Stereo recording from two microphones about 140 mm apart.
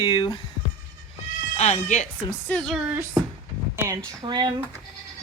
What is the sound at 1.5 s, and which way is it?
Speech, 55° left (ahead or behind).